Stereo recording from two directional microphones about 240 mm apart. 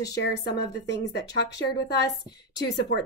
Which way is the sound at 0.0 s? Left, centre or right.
Left.